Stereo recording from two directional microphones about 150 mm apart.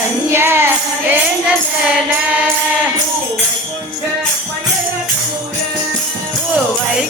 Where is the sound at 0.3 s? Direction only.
15° right (ahead or behind).